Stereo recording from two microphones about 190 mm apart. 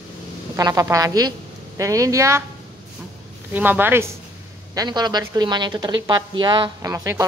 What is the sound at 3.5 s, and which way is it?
Speech, 10° right (ahead or behind).